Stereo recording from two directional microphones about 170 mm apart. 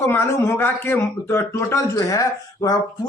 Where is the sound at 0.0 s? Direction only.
15° left (ahead or behind).